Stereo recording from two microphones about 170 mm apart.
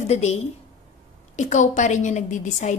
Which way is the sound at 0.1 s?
40° left (ahead or behind).